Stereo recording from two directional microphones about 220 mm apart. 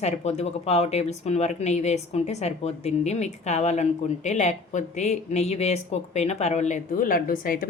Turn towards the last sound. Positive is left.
turn(degrees=40)  # may be behind; listen again after turning